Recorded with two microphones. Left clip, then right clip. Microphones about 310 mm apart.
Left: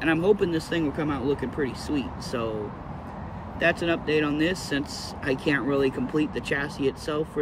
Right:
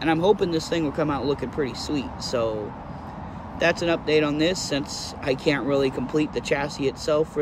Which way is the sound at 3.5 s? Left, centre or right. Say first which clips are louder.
Right 2 dB; centre.